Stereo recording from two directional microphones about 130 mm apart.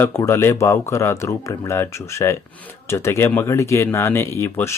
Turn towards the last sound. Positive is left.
turn(degrees=15)  # may be behind; listen again after turning